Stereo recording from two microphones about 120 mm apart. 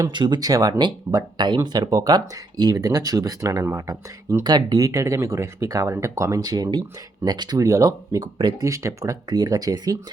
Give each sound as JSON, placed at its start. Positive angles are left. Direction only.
{"t": 0.0, "sound": "speech", "side_deg": -40}
{"t": 8.6, "sound": "speech", "side_deg": -25}